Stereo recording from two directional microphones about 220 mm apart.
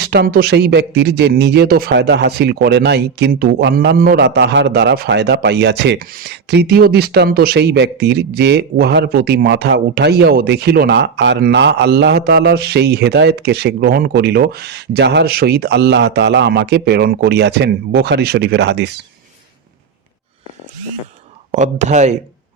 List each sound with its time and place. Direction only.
0.0 s speech: 50° right (ahead or behind)
21.5 s speech: 30° right (ahead or behind)